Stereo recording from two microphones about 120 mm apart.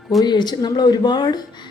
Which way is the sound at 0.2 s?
35° left (ahead or behind).